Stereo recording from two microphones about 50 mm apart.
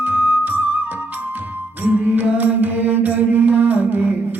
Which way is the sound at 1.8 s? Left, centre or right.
Right.